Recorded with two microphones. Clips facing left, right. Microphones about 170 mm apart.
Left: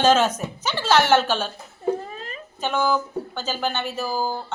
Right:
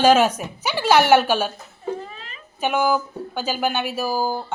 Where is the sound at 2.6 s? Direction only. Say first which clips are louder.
Right 2 dB; 10° right (ahead or behind).